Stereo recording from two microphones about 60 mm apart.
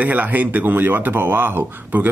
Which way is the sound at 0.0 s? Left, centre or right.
Right.